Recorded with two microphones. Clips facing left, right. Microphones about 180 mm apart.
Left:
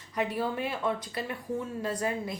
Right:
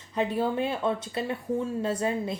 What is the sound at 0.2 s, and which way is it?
A woman's voice, 25° right (ahead or behind).